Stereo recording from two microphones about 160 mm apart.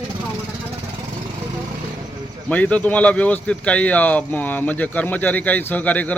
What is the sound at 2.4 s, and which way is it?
Speech, 10° left (ahead or behind).